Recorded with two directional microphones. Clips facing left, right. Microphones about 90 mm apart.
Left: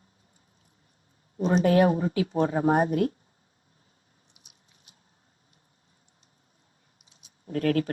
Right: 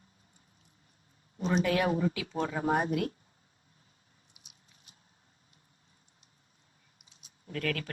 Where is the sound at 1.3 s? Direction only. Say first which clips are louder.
Left 7 dB; 40° left (ahead or behind).